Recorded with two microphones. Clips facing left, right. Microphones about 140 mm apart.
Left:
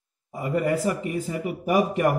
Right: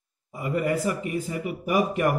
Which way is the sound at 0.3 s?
40° left (ahead or behind).